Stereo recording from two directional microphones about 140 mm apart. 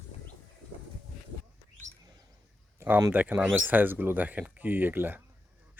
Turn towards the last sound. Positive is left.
turn(degrees=-15)  # may be behind; listen again after turning